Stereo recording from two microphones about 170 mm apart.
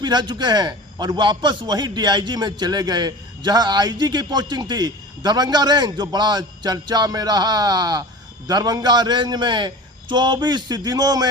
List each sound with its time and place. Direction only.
0.0 s a man's voice: 25° right (ahead or behind)